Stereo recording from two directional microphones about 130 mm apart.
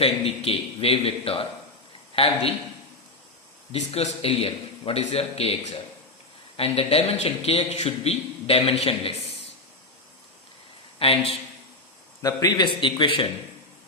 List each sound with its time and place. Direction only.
0.0 s a man's voice: 50° left (ahead or behind)
3.7 s a man's voice: 55° left (ahead or behind)
11.0 s a man's voice: 45° left (ahead or behind)
12.2 s a man's voice: 30° left (ahead or behind)